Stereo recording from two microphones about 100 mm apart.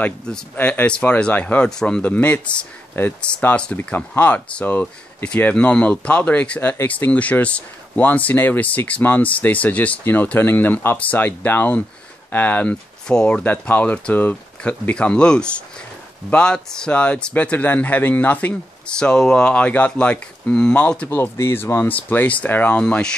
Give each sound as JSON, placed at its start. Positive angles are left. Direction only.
{"t": 0.0, "sound": "speech", "side_deg": 15}